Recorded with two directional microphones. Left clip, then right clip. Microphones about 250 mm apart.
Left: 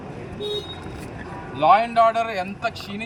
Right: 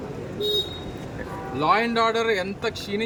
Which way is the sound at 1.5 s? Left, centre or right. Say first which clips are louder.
Left 5 dB; centre.